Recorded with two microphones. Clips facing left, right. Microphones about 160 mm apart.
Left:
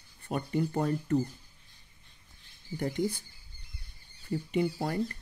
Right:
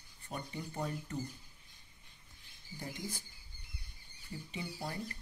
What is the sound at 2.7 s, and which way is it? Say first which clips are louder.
Speech: left 13 dB; 70° left (ahead or behind).